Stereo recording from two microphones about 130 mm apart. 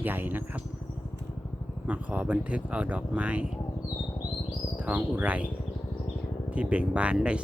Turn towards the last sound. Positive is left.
turn(degrees=-10)  # may be behind; listen again after turning